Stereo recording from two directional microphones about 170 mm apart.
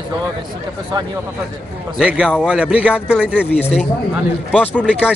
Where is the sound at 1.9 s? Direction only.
5° right (ahead or behind).